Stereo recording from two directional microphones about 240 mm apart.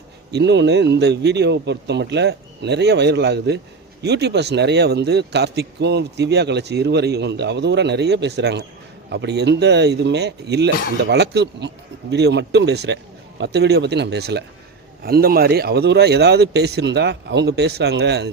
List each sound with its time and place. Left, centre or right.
0.3 s speech: right